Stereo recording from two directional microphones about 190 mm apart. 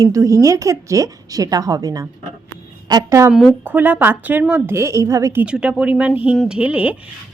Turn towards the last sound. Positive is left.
turn(degrees=-5)  # may be behind; listen again after turning